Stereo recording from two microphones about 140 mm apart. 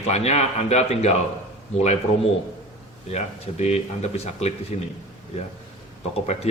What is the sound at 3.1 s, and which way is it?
Speech, 50° left (ahead or behind).